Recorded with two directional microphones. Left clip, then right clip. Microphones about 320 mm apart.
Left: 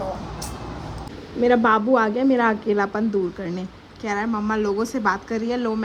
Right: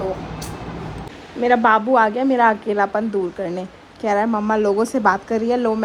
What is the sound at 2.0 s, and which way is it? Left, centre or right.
Speech, left.